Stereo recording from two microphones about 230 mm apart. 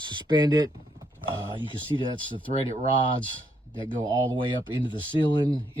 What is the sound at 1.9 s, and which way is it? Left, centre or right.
Speech, centre.